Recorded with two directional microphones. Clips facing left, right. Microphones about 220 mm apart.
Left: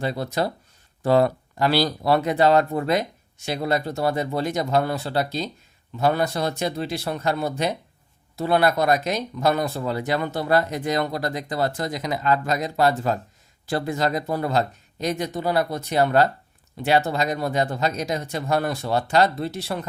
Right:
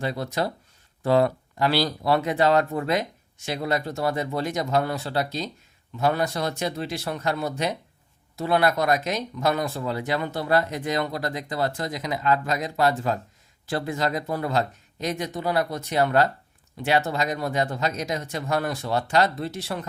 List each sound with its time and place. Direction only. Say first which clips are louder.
0.0 s speech: left 2 dB; 35° left (ahead or behind)